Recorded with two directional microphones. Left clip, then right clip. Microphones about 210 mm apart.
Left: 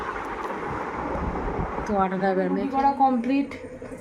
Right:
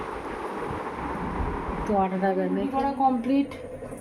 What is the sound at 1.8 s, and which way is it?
Speech, 20° left (ahead or behind).